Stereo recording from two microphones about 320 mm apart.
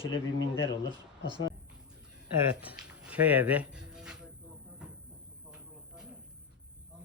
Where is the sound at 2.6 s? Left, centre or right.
Centre.